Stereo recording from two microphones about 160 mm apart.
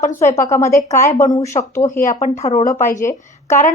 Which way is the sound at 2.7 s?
55° left (ahead or behind).